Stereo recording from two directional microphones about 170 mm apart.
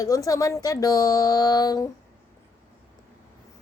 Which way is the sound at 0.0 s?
20° left (ahead or behind).